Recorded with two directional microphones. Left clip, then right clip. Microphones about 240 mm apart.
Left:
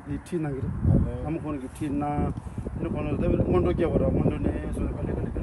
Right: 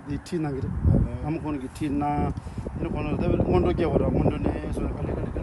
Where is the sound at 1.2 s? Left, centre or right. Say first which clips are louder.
Right 2 dB; centre.